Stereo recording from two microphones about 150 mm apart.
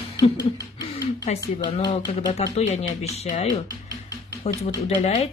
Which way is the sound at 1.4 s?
25° left (ahead or behind).